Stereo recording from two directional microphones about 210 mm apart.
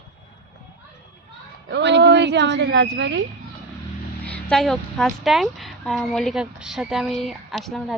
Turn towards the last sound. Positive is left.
turn(degrees=0)  # may be behind; listen again after turning